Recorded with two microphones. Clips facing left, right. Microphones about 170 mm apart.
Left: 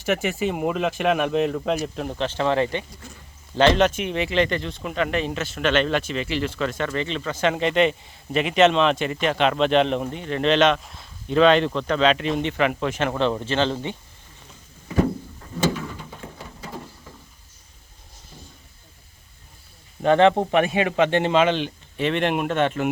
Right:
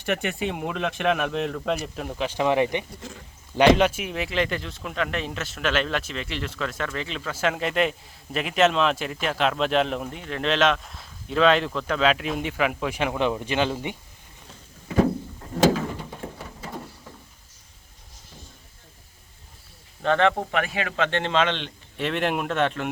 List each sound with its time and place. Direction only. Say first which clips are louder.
0.0 s speech: left 3 dB; centre (ahead or behind)
15.5 s a sound: right 4 dB; 90° right
20.0 s a man's voice: left 5 dB; 20° left (ahead or behind)